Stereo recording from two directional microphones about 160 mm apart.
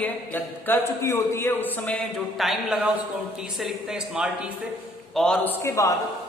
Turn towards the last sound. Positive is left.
turn(degrees=20)  # may be behind; listen again after turning